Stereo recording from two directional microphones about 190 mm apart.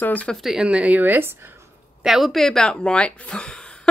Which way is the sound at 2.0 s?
Centre (ahead or behind).